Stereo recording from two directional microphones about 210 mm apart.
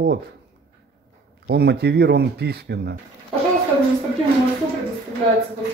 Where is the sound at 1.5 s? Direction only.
50° right (ahead or behind).